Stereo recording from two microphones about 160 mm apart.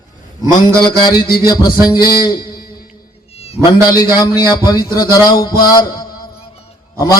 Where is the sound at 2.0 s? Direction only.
70° left (ahead or behind).